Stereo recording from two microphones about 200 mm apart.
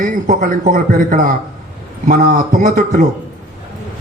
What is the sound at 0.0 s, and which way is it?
Speech, 40° right (ahead or behind).